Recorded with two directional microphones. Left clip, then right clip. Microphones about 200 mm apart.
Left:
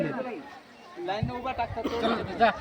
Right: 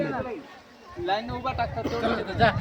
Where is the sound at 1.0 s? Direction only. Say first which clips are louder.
Right 4 dB; 35° right (ahead or behind).